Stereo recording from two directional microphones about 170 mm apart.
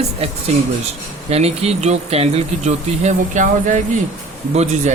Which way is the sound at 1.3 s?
40° right (ahead or behind).